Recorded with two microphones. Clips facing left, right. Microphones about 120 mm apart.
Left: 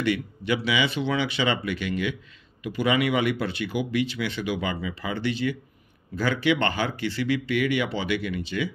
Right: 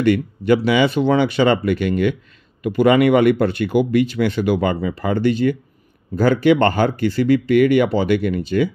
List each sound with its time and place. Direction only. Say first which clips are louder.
0.0 s speech: right 9 dB; 50° right (ahead or behind)